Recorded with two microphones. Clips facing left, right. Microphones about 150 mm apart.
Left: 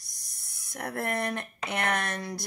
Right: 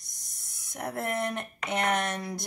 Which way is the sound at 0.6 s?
20° right (ahead or behind).